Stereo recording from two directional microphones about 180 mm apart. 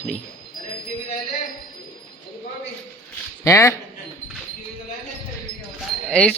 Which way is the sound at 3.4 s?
15° left (ahead or behind).